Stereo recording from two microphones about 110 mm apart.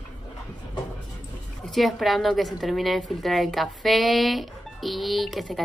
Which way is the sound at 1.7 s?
Centre (ahead or behind).